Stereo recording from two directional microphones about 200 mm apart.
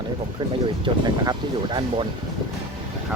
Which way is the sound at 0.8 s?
25° right (ahead or behind).